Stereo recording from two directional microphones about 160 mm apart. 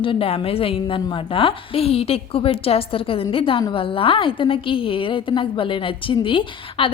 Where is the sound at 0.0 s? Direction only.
35° left (ahead or behind).